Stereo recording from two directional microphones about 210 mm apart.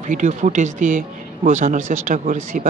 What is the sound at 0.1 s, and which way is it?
Speech, 35° right (ahead or behind).